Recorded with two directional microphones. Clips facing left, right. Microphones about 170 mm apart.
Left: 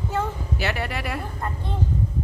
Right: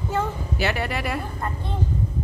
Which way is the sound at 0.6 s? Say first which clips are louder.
Right 3 dB; 20° right (ahead or behind).